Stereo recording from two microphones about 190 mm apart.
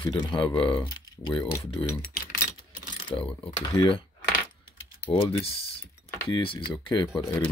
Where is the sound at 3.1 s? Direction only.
25° left (ahead or behind).